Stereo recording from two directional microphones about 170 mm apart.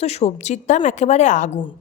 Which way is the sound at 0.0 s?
40° left (ahead or behind).